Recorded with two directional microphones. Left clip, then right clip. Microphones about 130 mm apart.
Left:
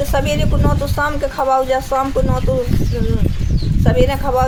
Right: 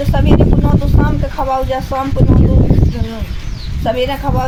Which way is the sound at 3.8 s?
40° left (ahead or behind).